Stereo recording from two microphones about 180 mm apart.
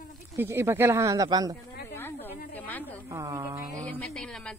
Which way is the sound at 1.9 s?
10° left (ahead or behind).